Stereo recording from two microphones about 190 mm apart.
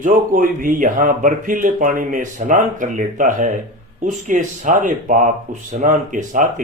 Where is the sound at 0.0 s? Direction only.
45° right (ahead or behind).